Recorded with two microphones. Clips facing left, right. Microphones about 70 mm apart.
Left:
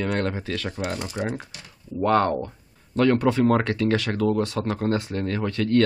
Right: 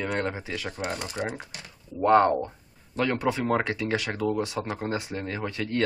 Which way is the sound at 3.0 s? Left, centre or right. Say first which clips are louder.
Left 7 dB; centre.